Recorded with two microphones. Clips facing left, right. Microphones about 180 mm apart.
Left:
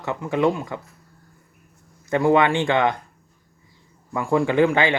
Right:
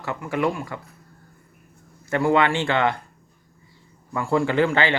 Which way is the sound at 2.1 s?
15° left (ahead or behind).